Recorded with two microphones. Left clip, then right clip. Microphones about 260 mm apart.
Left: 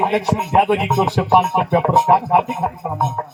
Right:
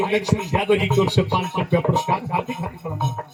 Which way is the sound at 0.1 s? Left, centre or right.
Centre.